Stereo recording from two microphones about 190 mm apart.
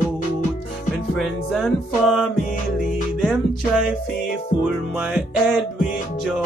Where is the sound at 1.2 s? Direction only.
Centre (ahead or behind).